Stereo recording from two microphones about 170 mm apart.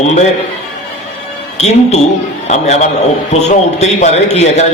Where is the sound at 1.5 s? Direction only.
40° left (ahead or behind).